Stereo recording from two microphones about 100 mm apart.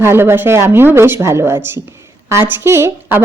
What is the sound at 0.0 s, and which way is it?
A woman's voice, 25° right (ahead or behind).